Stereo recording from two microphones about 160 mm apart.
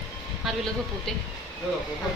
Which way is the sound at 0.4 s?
Centre (ahead or behind).